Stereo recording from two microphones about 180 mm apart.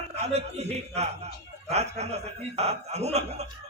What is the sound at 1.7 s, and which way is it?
A man's voice, 35° right (ahead or behind).